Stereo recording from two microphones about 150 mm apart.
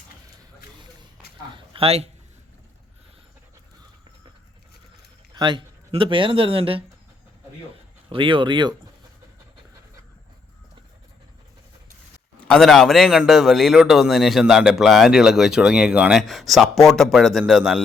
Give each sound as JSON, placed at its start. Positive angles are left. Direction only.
{"t": 1.5, "sound": "a sound", "side_deg": -40}
{"t": 5.3, "sound": "speech", "side_deg": -30}
{"t": 8.1, "sound": "speech", "side_deg": -35}
{"t": 12.5, "sound": "a man's voice", "side_deg": 0}